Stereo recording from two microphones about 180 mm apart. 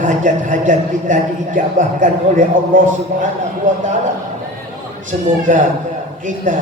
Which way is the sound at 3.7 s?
45° right (ahead or behind).